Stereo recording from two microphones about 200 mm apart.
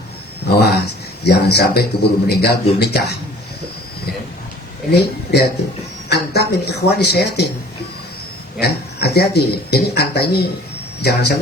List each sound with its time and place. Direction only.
0.4 s a sound: 55° left (ahead or behind)
2.3 s speech: 55° left (ahead or behind)
4.9 s speech: 55° left (ahead or behind)
8.5 s speech: 55° left (ahead or behind)